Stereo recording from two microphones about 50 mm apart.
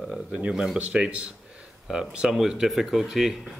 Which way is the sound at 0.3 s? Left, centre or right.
Centre.